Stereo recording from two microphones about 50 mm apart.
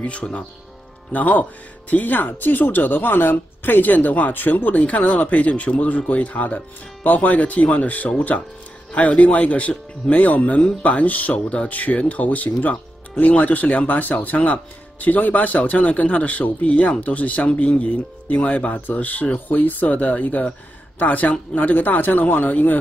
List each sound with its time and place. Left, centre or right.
1.1 s speech: left